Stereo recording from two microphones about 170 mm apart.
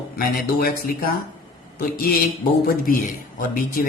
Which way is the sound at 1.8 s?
65° left (ahead or behind).